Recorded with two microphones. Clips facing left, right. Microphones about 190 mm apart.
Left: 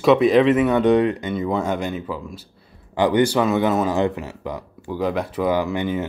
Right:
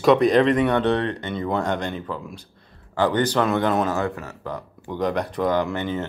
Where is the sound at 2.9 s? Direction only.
15° left (ahead or behind).